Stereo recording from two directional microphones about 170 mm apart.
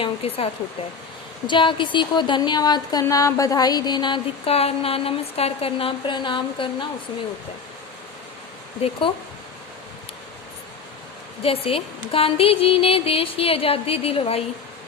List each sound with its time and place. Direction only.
0.0 s music: 35° left (ahead or behind)
1.5 s speech: 30° left (ahead or behind)
8.8 s music: 30° left (ahead or behind)
11.4 s music: 35° left (ahead or behind)